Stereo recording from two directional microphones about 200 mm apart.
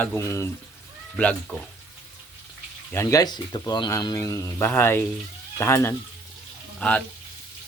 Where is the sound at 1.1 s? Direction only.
5° left (ahead or behind).